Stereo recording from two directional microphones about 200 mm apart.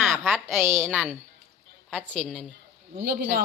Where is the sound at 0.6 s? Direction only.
10° right (ahead or behind).